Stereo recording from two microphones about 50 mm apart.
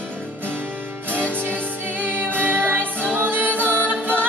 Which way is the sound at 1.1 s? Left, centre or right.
Right.